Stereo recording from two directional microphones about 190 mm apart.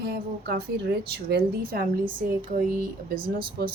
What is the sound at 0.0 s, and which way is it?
A woman's voice, 55° right (ahead or behind).